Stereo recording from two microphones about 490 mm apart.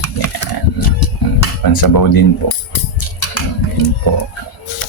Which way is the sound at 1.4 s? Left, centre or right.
Left.